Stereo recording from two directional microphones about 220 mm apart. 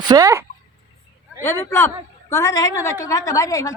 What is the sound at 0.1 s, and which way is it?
Speech, 15° right (ahead or behind).